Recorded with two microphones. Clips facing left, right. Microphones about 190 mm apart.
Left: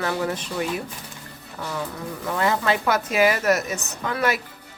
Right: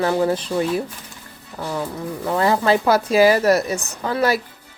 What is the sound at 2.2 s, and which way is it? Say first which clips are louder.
Speech: right 5 dB; 35° right (ahead or behind).